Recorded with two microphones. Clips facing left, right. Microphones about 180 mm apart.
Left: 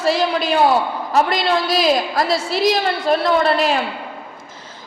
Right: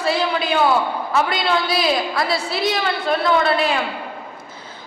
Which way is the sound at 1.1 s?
45° left (ahead or behind).